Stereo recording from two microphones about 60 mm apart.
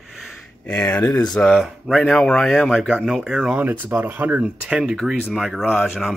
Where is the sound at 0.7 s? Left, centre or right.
Centre.